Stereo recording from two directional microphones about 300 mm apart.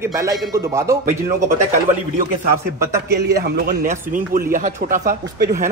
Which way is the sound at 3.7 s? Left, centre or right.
Right.